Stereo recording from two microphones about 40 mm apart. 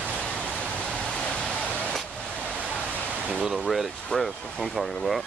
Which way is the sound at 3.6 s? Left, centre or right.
Centre.